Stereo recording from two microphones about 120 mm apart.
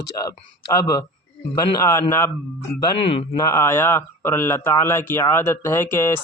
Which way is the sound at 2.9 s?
55° left (ahead or behind).